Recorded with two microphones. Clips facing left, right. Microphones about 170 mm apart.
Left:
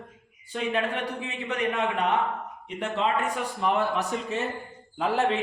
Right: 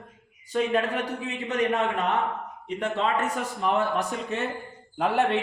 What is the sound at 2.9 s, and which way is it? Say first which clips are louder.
Speech: left 1 dB; 40° right (ahead or behind).